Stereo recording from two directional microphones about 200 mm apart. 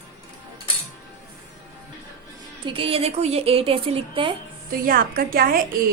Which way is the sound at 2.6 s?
25° right (ahead or behind).